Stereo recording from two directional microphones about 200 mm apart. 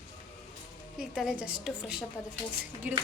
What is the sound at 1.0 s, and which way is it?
A woman's voice, centre (ahead or behind).